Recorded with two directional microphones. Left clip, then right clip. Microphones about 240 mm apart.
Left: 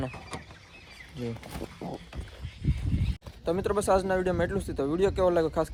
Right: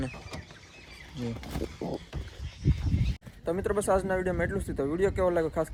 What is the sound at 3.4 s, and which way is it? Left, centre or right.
Speech, centre.